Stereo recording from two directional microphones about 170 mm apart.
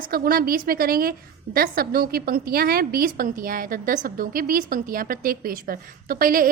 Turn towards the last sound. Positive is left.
turn(degrees=-55)  # may be behind; listen again after turning